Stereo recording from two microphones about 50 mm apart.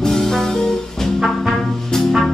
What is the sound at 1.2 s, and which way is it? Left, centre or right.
Music, centre.